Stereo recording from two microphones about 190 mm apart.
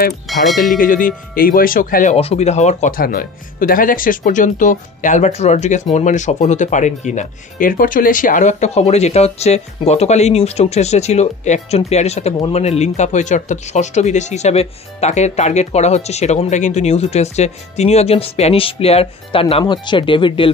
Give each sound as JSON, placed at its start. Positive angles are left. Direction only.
{"t": 0.3, "sound": "speech", "side_deg": 0}
{"t": 0.7, "sound": "speech", "side_deg": 45}
{"t": 2.1, "sound": "speech", "side_deg": 35}